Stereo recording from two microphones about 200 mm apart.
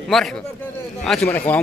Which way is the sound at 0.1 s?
Centre (ahead or behind).